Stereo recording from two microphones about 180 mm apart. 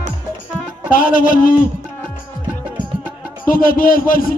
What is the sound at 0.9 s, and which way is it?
Speech, 50° left (ahead or behind).